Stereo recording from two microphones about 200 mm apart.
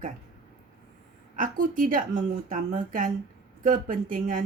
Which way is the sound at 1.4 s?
40° right (ahead or behind).